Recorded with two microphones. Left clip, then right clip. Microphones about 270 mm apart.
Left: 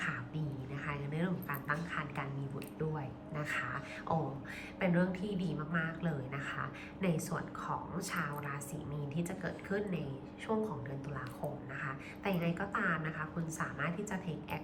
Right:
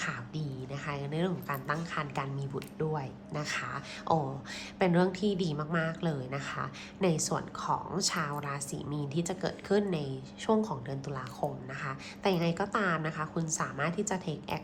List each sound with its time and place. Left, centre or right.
0.9 s a woman's voice: centre
11.8 s a woman's voice: centre